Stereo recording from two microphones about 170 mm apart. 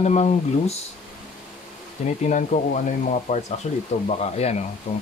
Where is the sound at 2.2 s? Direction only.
45° left (ahead or behind).